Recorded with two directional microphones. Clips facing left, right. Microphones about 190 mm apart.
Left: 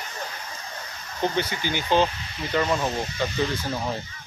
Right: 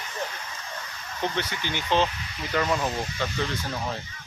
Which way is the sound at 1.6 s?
35° left (ahead or behind).